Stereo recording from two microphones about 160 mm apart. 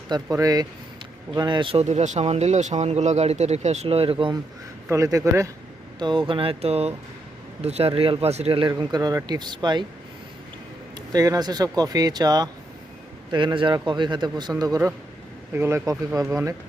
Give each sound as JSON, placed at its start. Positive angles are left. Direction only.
{"t": 0.1, "sound": "speech", "side_deg": -20}
{"t": 4.9, "sound": "speech", "side_deg": -20}
{"t": 6.0, "sound": "speech", "side_deg": -30}
{"t": 10.9, "sound": "speech", "side_deg": -25}